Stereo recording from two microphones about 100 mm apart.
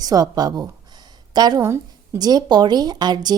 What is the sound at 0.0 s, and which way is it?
A woman's voice, 40° right (ahead or behind).